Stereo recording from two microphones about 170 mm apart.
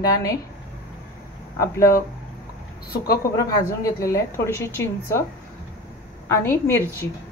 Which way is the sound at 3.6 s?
20° left (ahead or behind).